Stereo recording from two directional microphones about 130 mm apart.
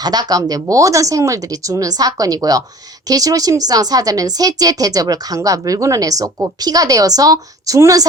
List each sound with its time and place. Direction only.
0.0 s speech: 30° right (ahead or behind)